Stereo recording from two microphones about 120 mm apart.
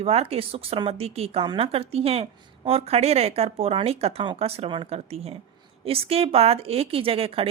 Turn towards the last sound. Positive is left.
turn(degrees=-50)  # may be behind; listen again after turning